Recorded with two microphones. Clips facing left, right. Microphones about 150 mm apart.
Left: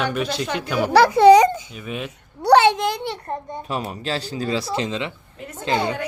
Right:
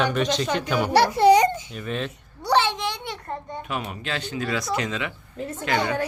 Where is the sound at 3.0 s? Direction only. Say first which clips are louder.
Left 5 dB; 30° left (ahead or behind).